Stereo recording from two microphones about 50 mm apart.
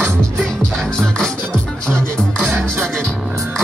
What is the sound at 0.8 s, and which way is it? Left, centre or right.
Music, centre.